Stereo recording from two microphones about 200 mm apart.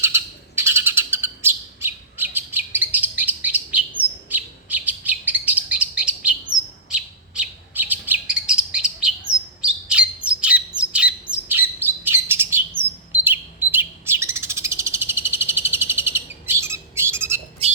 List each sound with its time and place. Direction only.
0.0 s bird: 10° right (ahead or behind)
4.3 s chirp: 10° right (ahead or behind)
5.7 s bird: 5° right (ahead or behind)
7.7 s bird: 10° right (ahead or behind)
12.8 s chirp: 10° right (ahead or behind)